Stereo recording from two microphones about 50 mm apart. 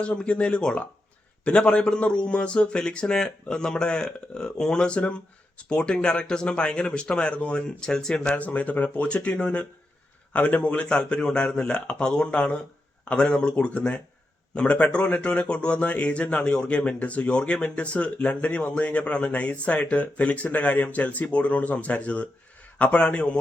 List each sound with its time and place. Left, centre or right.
0.0 s a man's voice: centre
8.4 s a man's voice: left